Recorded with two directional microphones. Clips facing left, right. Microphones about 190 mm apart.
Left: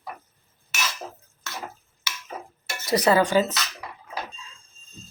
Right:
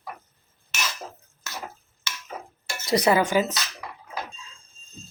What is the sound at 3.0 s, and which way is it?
Speech, 15° right (ahead or behind).